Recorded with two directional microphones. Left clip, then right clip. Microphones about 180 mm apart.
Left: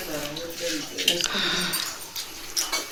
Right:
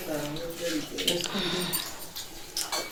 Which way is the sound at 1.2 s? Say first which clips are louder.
Left 5 dB; 15° right (ahead or behind).